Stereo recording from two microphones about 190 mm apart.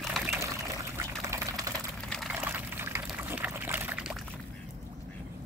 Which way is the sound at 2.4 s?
10° right (ahead or behind).